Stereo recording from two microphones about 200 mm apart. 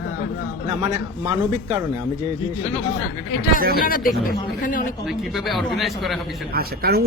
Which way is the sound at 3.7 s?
45° left (ahead or behind).